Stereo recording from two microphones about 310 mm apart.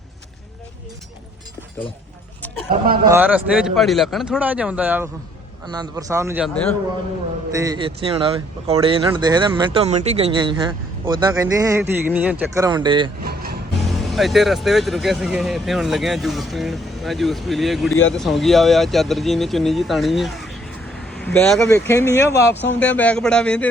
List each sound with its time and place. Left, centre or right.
2.8 s speech: right
3.1 s speech: centre
7.5 s speech: centre
13.2 s music: right
13.8 s speech: centre